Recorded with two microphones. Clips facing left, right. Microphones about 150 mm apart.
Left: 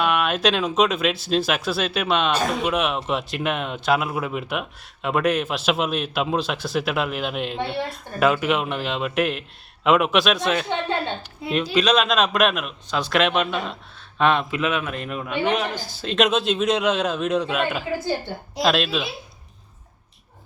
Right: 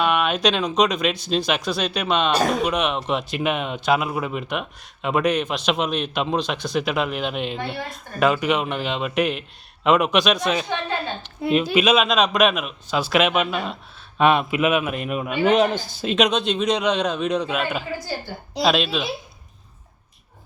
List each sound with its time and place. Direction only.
0.0 s a man's voice: centre (ahead or behind)
2.3 s speech: 40° right (ahead or behind)
2.6 s a man's voice: 5° left (ahead or behind)
15.4 s speech: 25° right (ahead or behind)
16.0 s a man's voice: centre (ahead or behind)